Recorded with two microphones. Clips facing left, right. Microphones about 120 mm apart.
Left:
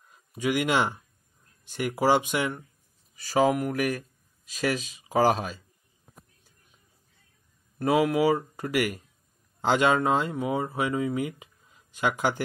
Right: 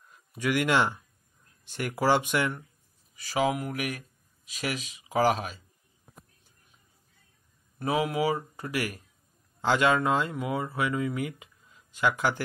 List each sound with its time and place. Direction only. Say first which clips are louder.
0.3 s speech: even; 25° left (ahead or behind)
3.2 s speech: left 4 dB; 40° left (ahead or behind)
7.9 s speech: left 5 dB; 40° left (ahead or behind)
9.9 s speech: left 2 dB; 35° left (ahead or behind)